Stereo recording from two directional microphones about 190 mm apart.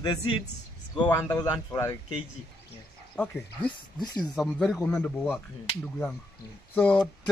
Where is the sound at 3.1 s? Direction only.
5° left (ahead or behind).